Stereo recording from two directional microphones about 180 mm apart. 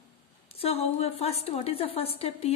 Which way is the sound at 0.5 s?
35° left (ahead or behind).